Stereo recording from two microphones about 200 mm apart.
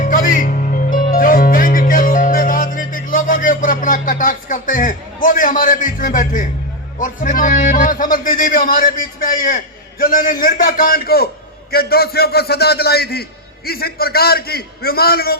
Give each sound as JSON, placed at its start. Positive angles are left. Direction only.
{"t": 0.0, "sound": "music", "side_deg": 45}
{"t": 7.0, "sound": "a man's voice", "side_deg": 40}